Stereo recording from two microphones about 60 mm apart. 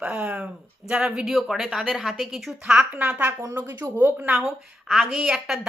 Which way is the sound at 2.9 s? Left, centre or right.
Right.